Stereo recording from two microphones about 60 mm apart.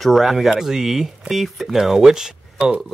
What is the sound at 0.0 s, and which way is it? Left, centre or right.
Speech, centre.